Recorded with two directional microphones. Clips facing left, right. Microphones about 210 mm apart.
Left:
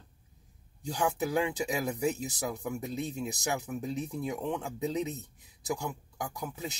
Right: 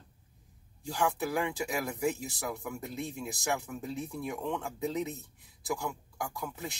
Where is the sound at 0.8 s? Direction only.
20° left (ahead or behind).